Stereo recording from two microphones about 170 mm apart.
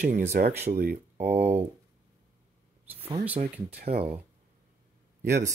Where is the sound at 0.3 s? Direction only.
60° right (ahead or behind).